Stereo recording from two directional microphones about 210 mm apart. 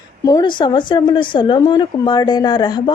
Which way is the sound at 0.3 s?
20° left (ahead or behind).